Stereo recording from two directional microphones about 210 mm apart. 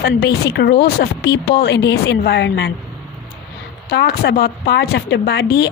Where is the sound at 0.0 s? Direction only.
55° left (ahead or behind).